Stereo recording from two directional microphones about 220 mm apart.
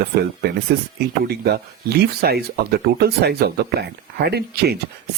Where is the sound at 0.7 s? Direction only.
45° right (ahead or behind).